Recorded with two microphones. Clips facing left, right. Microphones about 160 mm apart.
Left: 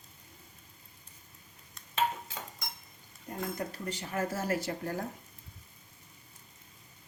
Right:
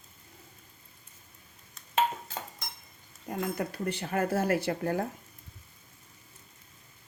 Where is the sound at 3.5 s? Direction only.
60° right (ahead or behind).